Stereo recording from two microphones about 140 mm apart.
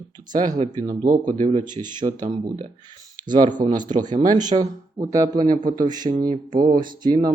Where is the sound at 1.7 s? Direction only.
30° right (ahead or behind).